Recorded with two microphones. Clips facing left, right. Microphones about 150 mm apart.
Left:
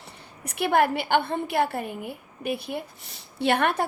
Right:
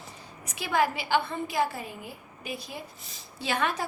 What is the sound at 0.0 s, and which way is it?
A woman's voice, 60° left (ahead or behind).